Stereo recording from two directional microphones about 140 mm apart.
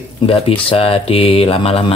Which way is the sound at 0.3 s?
40° left (ahead or behind).